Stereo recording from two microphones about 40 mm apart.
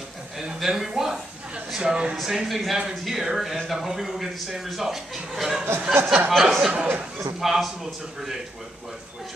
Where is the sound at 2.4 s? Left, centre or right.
Centre.